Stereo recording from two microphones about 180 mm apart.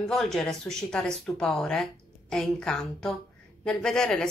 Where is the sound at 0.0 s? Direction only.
Centre (ahead or behind).